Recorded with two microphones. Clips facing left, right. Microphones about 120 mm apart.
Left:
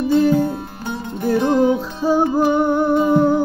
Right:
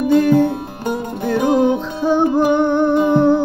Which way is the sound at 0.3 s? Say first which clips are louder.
Right 4 dB; 55° right (ahead or behind).